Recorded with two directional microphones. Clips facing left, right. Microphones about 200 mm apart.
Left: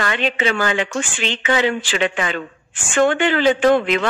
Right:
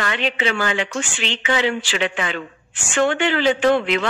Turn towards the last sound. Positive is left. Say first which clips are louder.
# left 2 dB
turn(degrees=50)  # may be behind; listen again after turning